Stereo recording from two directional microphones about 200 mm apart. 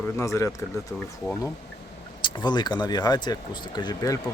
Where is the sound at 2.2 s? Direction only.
20° left (ahead or behind).